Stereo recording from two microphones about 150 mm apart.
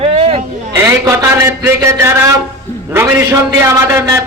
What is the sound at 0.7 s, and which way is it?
A man's voice, 15° right (ahead or behind).